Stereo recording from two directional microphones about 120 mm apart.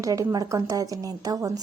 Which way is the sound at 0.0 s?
30° right (ahead or behind).